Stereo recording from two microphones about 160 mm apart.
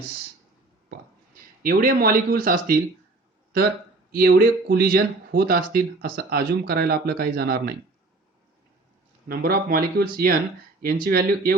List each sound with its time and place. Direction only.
0.9 s a sound: 65° right (ahead or behind)
4.1 s speech: 70° right (ahead or behind)
9.3 s speech: 70° right (ahead or behind)